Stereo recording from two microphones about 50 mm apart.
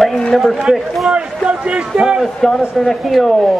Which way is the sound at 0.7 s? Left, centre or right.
Centre.